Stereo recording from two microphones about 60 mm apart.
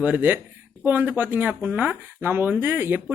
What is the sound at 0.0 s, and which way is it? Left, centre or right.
Speech, right.